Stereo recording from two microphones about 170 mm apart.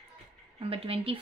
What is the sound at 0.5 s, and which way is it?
Speech, 35° right (ahead or behind).